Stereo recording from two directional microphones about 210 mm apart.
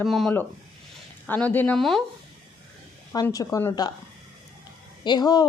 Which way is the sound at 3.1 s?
15° left (ahead or behind).